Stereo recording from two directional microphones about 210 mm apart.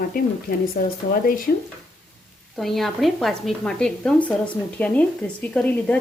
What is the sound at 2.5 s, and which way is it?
A woman's voice, centre (ahead or behind).